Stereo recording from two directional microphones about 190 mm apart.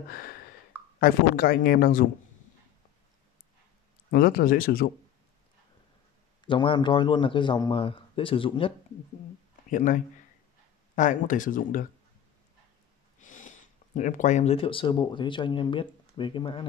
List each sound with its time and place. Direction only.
0.1 s speech: 50° left (ahead or behind)
4.1 s speech: 50° left (ahead or behind)
6.4 s a man's voice: 25° left (ahead or behind)
9.7 s speech: 40° left (ahead or behind)
13.2 s speech: 40° left (ahead or behind); by 16.6 s 25° left (ahead or behind)